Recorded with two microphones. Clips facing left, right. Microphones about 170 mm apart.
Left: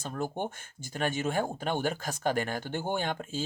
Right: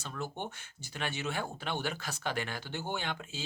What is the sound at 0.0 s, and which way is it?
Speech, 50° left (ahead or behind).